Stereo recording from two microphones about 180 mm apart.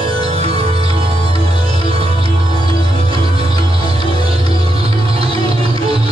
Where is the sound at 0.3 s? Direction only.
35° right (ahead or behind).